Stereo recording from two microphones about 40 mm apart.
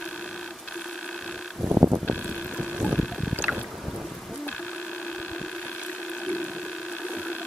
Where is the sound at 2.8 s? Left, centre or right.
Left.